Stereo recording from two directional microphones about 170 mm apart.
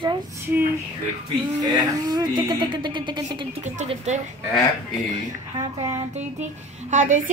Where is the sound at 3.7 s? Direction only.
45° right (ahead or behind).